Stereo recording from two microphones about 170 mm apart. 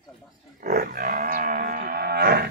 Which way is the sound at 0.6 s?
60° right (ahead or behind).